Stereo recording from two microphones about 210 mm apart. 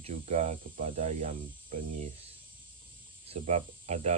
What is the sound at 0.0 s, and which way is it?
Speech, 35° right (ahead or behind).